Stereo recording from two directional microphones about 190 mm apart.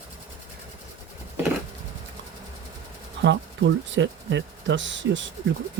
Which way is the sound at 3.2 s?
70° right (ahead or behind).